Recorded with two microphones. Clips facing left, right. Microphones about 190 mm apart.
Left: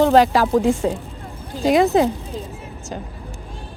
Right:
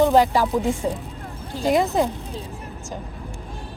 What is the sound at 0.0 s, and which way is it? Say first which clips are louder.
Speech: left 3 dB; 85° left.